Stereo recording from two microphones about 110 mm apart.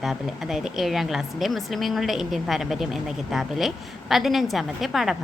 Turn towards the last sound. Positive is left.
turn(degrees=0)  # may be behind; listen again after turning